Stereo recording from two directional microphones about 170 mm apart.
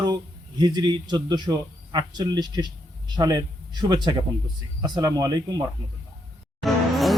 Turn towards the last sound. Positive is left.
turn(degrees=0)  # may be behind; listen again after turning